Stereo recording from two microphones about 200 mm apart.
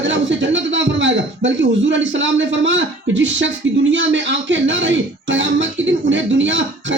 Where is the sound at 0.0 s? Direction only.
65° right (ahead or behind).